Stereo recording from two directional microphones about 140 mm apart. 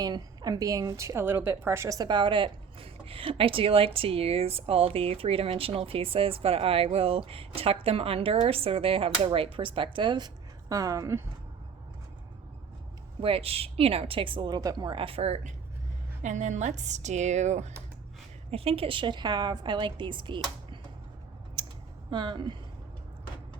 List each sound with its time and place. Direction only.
0.0 s a woman's voice: 25° right (ahead or behind)
13.2 s a woman's voice: 45° right (ahead or behind)
16.2 s a woman's voice: 60° right (ahead or behind)
18.5 s a woman's voice: 45° right (ahead or behind)
21.6 s a sound: 30° right (ahead or behind)
22.1 s a woman's voice: 35° right (ahead or behind)